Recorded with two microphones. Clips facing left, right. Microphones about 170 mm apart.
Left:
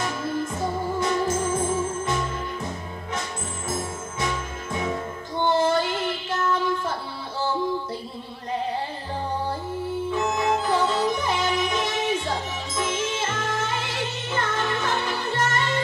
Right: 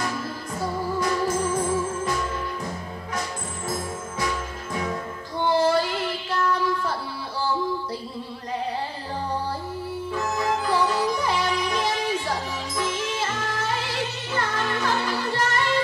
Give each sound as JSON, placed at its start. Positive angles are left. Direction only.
{"t": 0.0, "sound": "music", "side_deg": 25}
{"t": 5.5, "sound": "child singing", "side_deg": 20}
{"t": 10.1, "sound": "music", "side_deg": 20}